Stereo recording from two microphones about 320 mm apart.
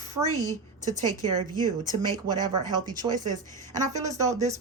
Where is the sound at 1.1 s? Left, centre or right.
Centre.